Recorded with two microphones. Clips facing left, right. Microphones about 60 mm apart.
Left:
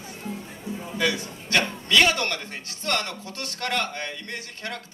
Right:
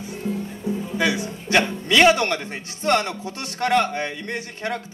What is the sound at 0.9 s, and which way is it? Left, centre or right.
A man's voice, centre.